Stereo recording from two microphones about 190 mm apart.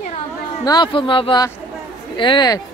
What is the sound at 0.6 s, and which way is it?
Speech, 25° left (ahead or behind).